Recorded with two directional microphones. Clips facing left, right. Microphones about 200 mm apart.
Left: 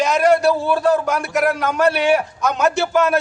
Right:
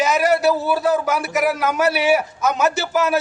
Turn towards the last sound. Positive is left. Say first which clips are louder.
# left 3 dB
turn(degrees=-5)  # may be behind; listen again after turning